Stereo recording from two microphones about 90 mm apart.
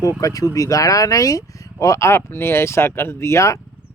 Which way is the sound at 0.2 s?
40° left (ahead or behind).